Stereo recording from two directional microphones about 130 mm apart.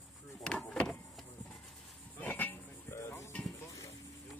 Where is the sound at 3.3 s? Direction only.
5° left (ahead or behind).